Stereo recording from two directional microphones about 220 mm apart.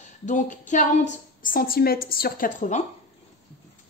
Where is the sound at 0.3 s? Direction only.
35° left (ahead or behind).